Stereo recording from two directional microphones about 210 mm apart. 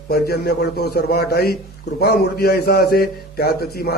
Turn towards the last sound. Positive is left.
turn(degrees=50)  # may be behind; listen again after turning